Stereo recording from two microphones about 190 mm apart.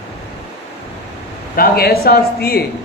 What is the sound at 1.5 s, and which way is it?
A man's voice, 50° left (ahead or behind).